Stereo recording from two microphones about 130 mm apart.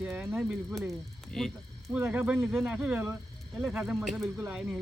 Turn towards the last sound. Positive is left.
turn(degrees=-10)  # may be behind; listen again after turning